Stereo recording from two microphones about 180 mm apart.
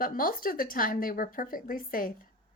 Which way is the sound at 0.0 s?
55° left (ahead or behind).